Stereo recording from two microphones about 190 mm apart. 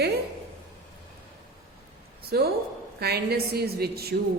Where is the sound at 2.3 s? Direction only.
55° right (ahead or behind).